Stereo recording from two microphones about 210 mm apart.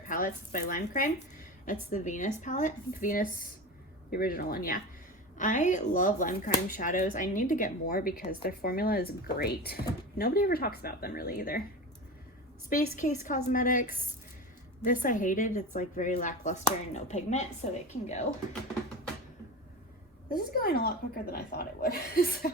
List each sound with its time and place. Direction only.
0.1 s speech: 40° left (ahead or behind)
12.7 s speech: 35° left (ahead or behind)
14.8 s speech: 40° left (ahead or behind)
20.3 s speech: 45° left (ahead or behind)